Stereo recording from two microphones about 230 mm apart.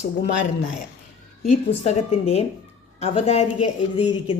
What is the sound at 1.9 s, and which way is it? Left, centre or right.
A woman's voice, left.